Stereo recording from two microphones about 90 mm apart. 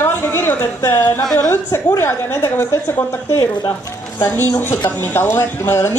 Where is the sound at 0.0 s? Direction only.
25° left (ahead or behind).